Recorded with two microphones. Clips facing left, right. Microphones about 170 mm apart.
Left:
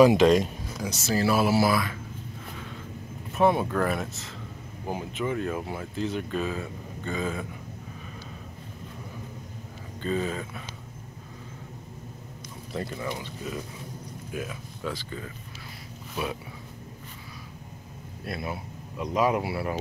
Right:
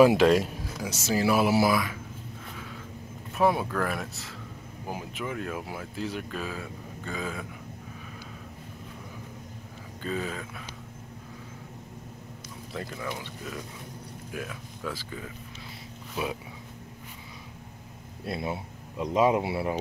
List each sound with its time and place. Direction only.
0.0 s speech: 5° right (ahead or behind)
3.3 s speech: centre (ahead or behind)
10.0 s speech: centre (ahead or behind)
12.7 s speech: 5° left (ahead or behind)
15.0 s speech: 10° right (ahead or behind)
18.2 s speech: 25° right (ahead or behind)